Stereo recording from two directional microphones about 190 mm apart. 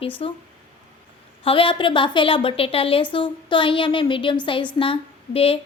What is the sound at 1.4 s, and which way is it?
A woman's voice, 30° left (ahead or behind).